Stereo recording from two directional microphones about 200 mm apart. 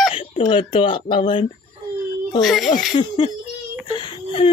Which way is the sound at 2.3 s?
Centre (ahead or behind).